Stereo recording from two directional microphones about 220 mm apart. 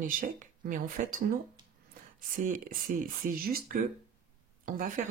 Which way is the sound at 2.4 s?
40° right (ahead or behind).